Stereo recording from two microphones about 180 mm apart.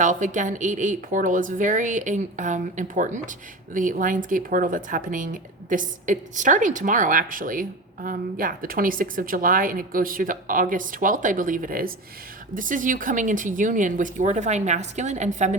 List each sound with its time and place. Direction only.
0.0 s a woman's voice: 45° right (ahead or behind)